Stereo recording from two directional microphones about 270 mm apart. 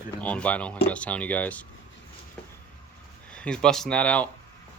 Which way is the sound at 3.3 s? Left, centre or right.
Centre.